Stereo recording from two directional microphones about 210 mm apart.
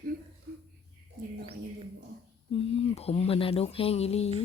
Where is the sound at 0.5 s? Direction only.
45° right (ahead or behind).